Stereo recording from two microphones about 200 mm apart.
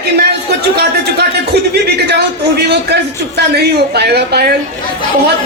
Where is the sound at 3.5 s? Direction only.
55° right (ahead or behind).